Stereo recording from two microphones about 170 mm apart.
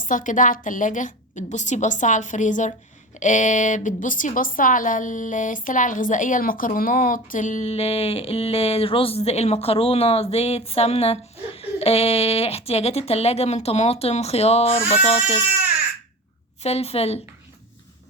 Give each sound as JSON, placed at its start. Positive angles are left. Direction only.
{"t": 0.1, "sound": "a woman's voice", "side_deg": 50}
{"t": 16.6, "sound": "a woman's voice", "side_deg": 35}